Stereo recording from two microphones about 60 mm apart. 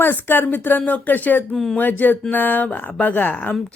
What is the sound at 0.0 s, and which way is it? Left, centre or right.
Speech, left.